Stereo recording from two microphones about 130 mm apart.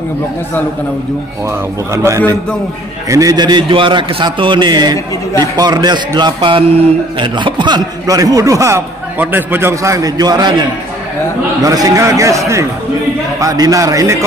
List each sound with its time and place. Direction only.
1.9 s a man's voice: 20° right (ahead or behind)
11.6 s a man's voice: 30° right (ahead or behind)